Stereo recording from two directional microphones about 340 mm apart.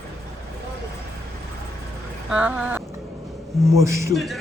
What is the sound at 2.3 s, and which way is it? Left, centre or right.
A man's voice, centre.